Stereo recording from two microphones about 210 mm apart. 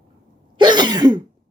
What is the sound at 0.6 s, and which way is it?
Cough, 20° right (ahead or behind).